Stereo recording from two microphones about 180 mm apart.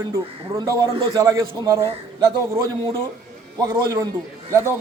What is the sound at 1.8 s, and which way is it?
Speech, 30° right (ahead or behind).